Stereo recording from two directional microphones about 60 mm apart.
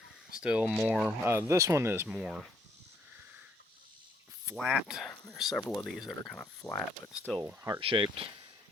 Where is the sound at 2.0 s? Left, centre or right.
Centre.